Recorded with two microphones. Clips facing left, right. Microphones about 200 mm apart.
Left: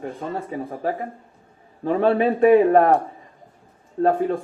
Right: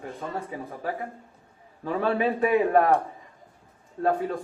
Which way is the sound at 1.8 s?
35° left (ahead or behind).